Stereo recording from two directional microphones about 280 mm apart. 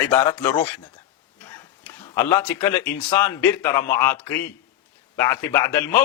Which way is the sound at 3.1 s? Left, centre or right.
Centre.